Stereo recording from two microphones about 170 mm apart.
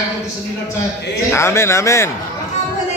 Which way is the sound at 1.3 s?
15° left (ahead or behind).